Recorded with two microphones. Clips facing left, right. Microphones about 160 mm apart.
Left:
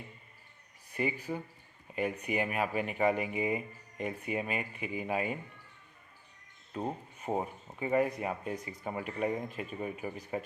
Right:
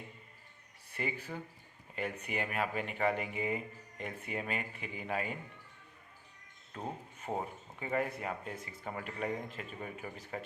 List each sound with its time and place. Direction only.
0.9 s speech: 15° left (ahead or behind)
6.7 s speech: 20° left (ahead or behind)